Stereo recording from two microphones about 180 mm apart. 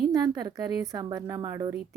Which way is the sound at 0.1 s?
20° right (ahead or behind).